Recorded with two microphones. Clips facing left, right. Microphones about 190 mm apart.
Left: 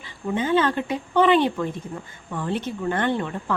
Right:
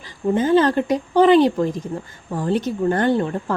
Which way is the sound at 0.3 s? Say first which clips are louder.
Right 5 dB; 40° right (ahead or behind).